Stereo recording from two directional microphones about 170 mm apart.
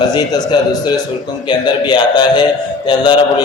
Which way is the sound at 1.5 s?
25° left (ahead or behind).